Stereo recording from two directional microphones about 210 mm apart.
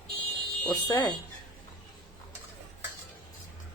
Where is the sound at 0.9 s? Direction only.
15° left (ahead or behind).